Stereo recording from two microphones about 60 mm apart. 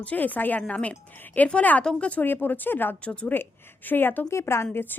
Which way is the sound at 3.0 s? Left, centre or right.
Left.